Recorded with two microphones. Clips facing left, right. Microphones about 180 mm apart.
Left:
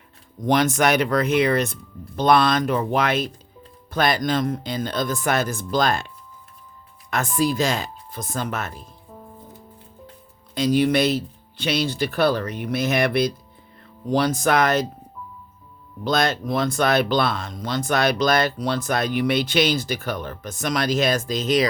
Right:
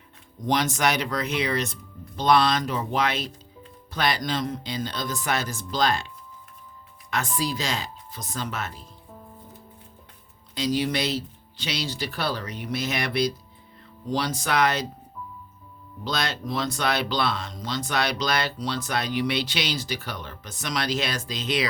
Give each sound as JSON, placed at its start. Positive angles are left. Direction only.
{"t": 0.4, "sound": "speech", "side_deg": 55}
{"t": 7.1, "sound": "speech", "side_deg": 50}
{"t": 10.5, "sound": "speech", "side_deg": 55}
{"t": 16.0, "sound": "speech", "side_deg": 50}